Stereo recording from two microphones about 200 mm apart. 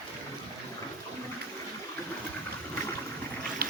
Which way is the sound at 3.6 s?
50° right (ahead or behind).